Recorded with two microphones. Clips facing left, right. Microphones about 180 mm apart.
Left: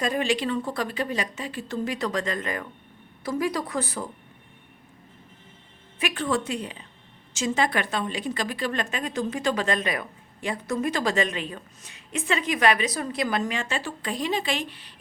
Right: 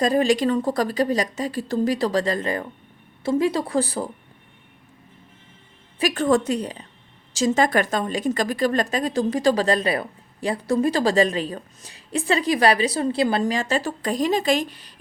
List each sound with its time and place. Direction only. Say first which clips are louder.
0.0 s a woman's voice: right 6 dB; 40° right (ahead or behind)
6.0 s a woman's voice: right 7 dB; 40° right (ahead or behind)